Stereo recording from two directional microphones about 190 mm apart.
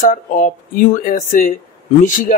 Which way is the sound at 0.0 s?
45° left (ahead or behind).